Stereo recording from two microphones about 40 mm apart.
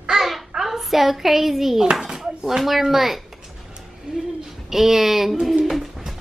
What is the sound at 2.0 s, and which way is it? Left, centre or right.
Dishes, centre.